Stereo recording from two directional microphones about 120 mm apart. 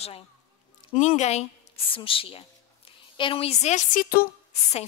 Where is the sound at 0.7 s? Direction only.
80° left.